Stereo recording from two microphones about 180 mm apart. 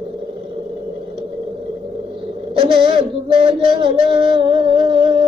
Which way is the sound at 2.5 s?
30° right (ahead or behind).